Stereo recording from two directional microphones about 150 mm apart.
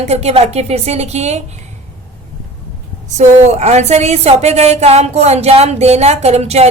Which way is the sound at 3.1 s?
50° right (ahead or behind).